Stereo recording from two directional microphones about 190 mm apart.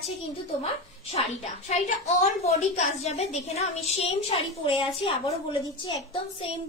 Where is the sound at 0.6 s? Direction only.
35° left (ahead or behind).